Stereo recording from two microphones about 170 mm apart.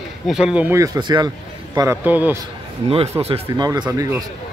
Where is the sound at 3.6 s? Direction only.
25° right (ahead or behind).